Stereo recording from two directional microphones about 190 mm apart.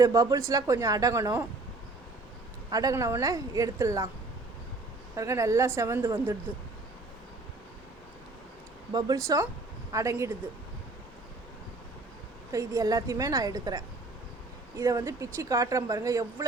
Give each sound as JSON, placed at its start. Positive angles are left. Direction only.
{"t": 0.0, "sound": "speech", "side_deg": -15}
{"t": 2.6, "sound": "speech", "side_deg": -20}
{"t": 5.1, "sound": "speech", "side_deg": -15}
{"t": 8.9, "sound": "speech", "side_deg": -20}
{"t": 12.5, "sound": "a woman's voice", "side_deg": -15}